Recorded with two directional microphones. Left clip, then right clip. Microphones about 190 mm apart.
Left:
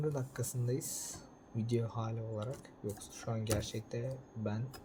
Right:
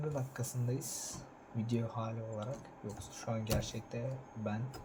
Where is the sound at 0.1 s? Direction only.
55° left (ahead or behind).